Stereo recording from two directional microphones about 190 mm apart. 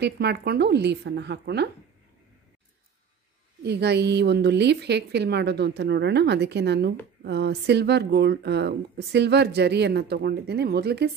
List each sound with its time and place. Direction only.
0.0 s speech: 60° right (ahead or behind)
3.6 s speech: 60° right (ahead or behind)